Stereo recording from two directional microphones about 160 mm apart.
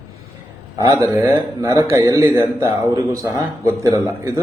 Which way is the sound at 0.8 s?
20° right (ahead or behind).